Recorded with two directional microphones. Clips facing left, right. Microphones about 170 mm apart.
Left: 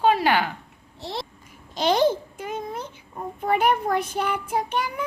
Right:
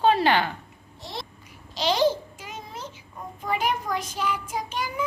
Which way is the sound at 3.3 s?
55° left (ahead or behind).